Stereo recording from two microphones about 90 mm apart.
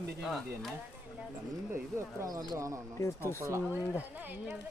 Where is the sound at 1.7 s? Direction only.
30° right (ahead or behind).